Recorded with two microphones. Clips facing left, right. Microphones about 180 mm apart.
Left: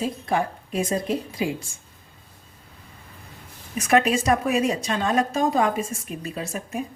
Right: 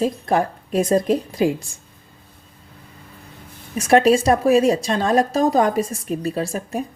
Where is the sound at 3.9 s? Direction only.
35° right (ahead or behind).